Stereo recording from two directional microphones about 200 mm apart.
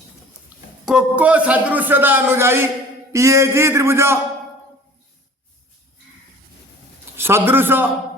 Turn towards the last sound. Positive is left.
turn(degrees=-10)  # may be behind; listen again after turning